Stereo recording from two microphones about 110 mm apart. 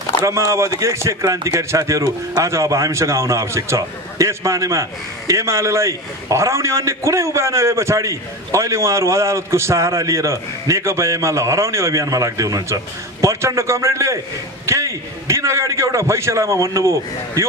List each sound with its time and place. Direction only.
0.2 s a man's voice: 30° right (ahead or behind)